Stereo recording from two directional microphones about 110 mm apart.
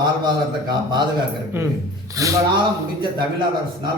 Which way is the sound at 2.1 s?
30° right (ahead or behind).